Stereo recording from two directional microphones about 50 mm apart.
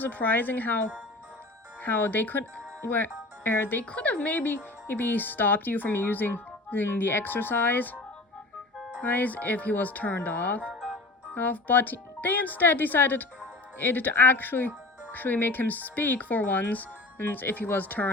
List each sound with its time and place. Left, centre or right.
0.0 s speech: left
1.8 s speech: left
3.8 s speech: left
9.0 s speech: left
10.8 s music: centre
11.3 s speech: left